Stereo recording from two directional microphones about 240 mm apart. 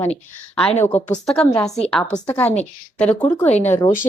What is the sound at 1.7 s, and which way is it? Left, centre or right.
Speech, left.